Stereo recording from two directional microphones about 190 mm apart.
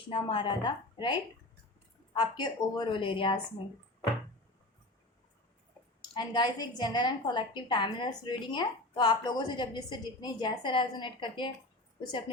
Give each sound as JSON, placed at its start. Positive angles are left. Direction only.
{"t": 0.1, "sound": "a woman's voice", "side_deg": 25}
{"t": 6.0, "sound": "a woman's voice", "side_deg": 20}